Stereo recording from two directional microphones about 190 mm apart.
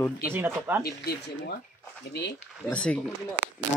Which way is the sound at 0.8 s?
55° left (ahead or behind).